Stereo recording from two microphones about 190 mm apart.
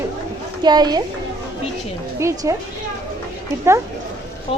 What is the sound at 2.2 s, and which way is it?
Speech, 15° right (ahead or behind).